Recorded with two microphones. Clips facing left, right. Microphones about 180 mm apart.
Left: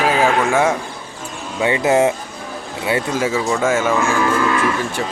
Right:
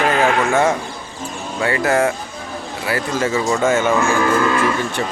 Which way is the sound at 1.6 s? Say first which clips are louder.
Left 2 dB; 20° left (ahead or behind).